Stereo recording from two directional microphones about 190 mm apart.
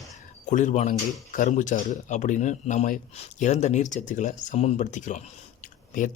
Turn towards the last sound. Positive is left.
turn(degrees=45)  # may be behind; listen again after turning